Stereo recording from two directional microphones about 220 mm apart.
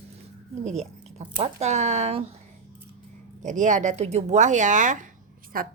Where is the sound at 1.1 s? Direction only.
30° right (ahead or behind).